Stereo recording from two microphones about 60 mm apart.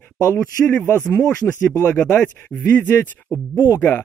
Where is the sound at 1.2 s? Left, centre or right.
Centre.